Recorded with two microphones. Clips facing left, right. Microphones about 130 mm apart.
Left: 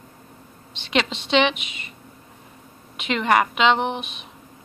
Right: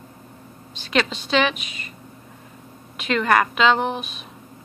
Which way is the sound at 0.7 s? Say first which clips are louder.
Right 1 dB; 25° left (ahead or behind).